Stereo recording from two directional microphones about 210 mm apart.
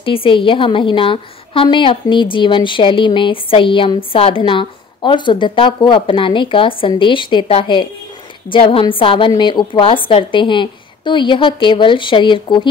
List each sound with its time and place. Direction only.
0.0 s a woman's voice: 25° left (ahead or behind)